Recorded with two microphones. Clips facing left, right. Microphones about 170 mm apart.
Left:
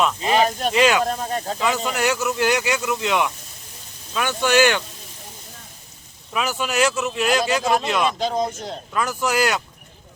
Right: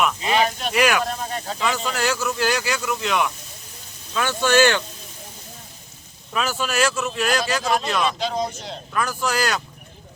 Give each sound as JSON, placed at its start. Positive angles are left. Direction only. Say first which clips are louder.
{"t": 0.2, "sound": "a sound", "louder": "left 2 dB", "side_deg": 40}
{"t": 0.7, "sound": "speech", "louder": "left 2 dB", "side_deg": 20}
{"t": 1.0, "sound": "speech", "louder": "left 3 dB", "side_deg": 40}
{"t": 1.6, "sound": "speech", "louder": "left 1 dB", "side_deg": 20}
{"t": 6.3, "sound": "speech", "louder": "left 1 dB", "side_deg": 15}
{"t": 8.2, "sound": "speech", "louder": "left 2 dB", "side_deg": 50}
{"t": 8.9, "sound": "speech", "louder": "left 1 dB", "side_deg": 20}